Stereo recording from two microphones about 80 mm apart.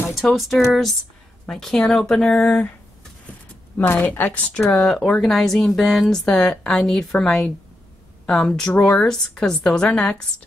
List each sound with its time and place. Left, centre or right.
0.1 s a woman's voice: centre
3.7 s speech: left
4.7 s a woman's voice: centre